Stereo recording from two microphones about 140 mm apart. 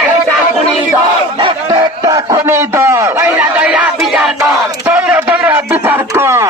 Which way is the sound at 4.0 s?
5° right (ahead or behind).